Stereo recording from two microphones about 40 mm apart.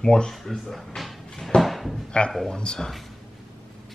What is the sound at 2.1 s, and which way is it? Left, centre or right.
Speech, left.